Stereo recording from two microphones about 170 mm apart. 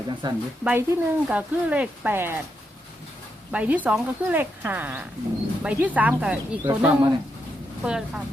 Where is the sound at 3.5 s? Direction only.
10° right (ahead or behind).